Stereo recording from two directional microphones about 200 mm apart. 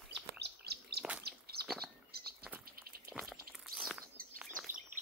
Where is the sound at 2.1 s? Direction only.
50° right (ahead or behind).